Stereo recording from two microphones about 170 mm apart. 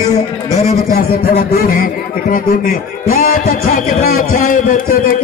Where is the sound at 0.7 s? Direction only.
55° left (ahead or behind).